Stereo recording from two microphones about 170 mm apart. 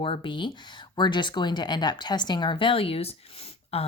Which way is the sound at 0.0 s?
30° left (ahead or behind).